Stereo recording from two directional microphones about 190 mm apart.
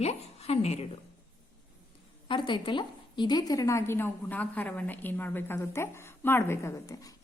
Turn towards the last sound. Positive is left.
turn(degrees=20)  # may be behind; listen again after turning